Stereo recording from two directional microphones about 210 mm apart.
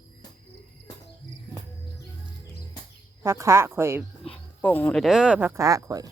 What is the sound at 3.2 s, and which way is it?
Speech, 15° right (ahead or behind).